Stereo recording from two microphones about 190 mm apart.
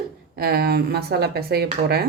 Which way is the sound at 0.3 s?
55° right (ahead or behind).